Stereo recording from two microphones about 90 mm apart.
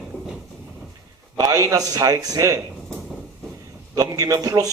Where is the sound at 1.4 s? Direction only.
40° right (ahead or behind).